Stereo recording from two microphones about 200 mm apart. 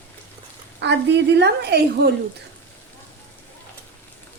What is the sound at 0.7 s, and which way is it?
A woman's voice, 60° right (ahead or behind).